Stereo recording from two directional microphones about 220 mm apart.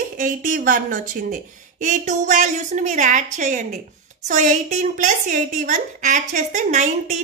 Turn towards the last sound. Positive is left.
turn(degrees=-35)  # may be behind; listen again after turning